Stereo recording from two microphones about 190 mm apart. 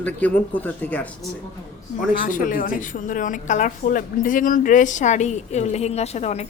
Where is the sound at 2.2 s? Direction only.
45° left (ahead or behind).